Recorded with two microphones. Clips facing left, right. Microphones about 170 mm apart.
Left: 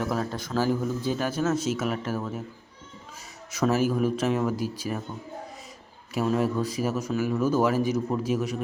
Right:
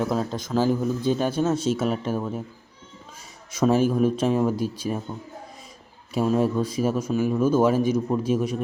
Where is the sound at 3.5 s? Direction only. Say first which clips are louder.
Right 4 dB; 25° right (ahead or behind).